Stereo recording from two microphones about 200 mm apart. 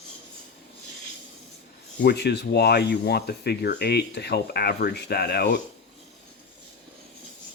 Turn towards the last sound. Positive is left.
turn(degrees=55)  # may be behind; listen again after turning